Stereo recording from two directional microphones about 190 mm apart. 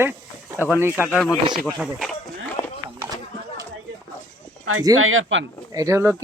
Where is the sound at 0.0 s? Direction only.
10° right (ahead or behind).